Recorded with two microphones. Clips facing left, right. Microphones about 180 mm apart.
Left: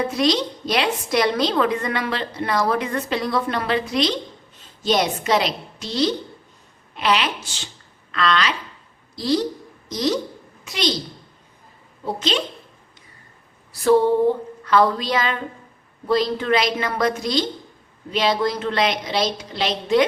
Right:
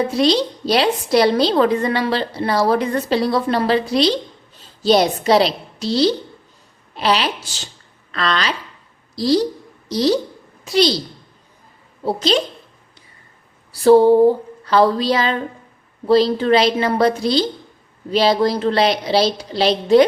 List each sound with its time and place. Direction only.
0.0 s a woman's voice: 30° right (ahead or behind)
12.0 s a woman's voice: 35° right (ahead or behind)
13.7 s a woman's voice: 30° right (ahead or behind)